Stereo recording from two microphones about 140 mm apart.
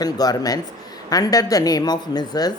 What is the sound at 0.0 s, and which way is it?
Speech, 25° left (ahead or behind).